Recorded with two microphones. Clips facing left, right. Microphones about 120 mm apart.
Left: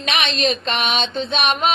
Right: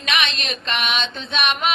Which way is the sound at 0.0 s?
40° left (ahead or behind).